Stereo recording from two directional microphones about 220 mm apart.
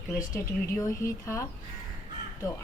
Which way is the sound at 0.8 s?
10° left (ahead or behind).